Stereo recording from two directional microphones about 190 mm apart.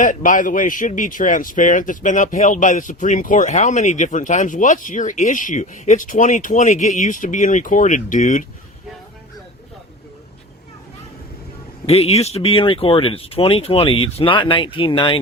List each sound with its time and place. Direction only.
0.0 s speech: 40° left (ahead or behind)
11.9 s speech: 30° left (ahead or behind)